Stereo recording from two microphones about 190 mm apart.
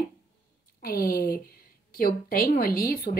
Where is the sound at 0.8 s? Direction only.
50° left (ahead or behind).